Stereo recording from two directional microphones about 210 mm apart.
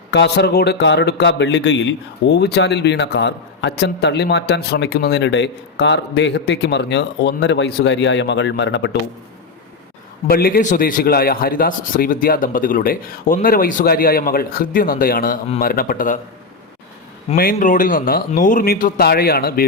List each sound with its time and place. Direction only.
0.1 s a man's voice: 55° left (ahead or behind)
10.2 s a man's voice: 45° left (ahead or behind)
17.3 s a man's voice: 45° left (ahead or behind)